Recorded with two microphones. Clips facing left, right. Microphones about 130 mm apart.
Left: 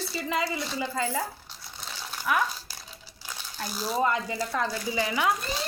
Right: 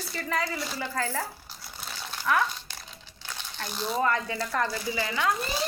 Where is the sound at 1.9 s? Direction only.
Centre (ahead or behind).